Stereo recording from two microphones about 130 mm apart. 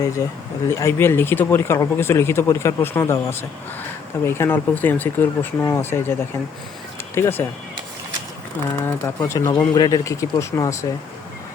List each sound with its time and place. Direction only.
0.2 s speech: 30° left (ahead or behind)
7.2 s speech: 15° left (ahead or behind)
8.8 s speech: 20° left (ahead or behind)